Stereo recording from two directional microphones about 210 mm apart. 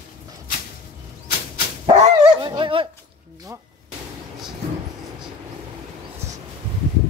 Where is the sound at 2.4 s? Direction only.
25° right (ahead or behind).